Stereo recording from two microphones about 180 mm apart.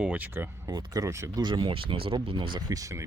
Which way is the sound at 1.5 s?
25° right (ahead or behind).